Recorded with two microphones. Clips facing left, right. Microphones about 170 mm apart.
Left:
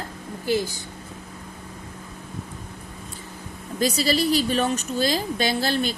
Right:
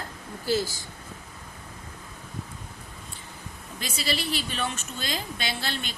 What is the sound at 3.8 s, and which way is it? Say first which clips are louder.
A woman's voice: left 10 dB; 40° left (ahead or behind).